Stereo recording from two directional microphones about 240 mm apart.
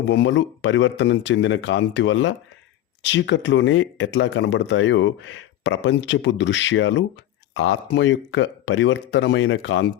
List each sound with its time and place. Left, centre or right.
0.0 s speech: left